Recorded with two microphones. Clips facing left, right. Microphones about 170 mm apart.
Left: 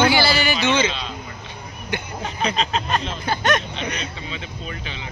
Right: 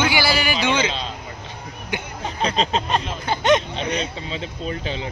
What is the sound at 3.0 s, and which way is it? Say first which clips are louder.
Speech: right 1 dB; 20° right (ahead or behind).